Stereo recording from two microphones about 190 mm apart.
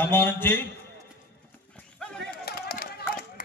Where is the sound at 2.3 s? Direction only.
50° left (ahead or behind).